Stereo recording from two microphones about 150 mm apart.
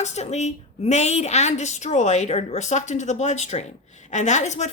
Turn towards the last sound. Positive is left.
turn(degrees=50)  # may be behind; listen again after turning